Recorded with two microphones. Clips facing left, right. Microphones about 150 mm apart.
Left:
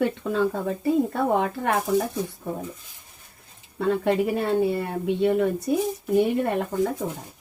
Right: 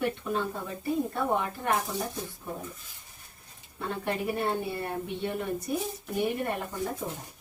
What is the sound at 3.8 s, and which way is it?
A woman's voice, 85° left.